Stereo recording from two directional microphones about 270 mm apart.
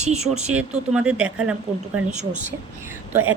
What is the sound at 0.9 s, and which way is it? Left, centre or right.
Speech, centre.